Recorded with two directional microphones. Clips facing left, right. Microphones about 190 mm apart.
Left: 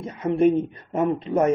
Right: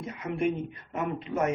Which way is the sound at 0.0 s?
30° left (ahead or behind).